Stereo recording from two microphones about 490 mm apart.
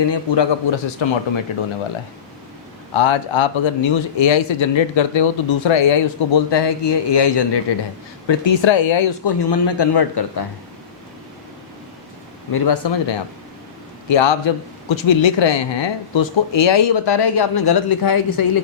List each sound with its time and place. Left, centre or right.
0.1 s speech: left
1.0 s speech: left
2.9 s speech: left
12.5 s speech: left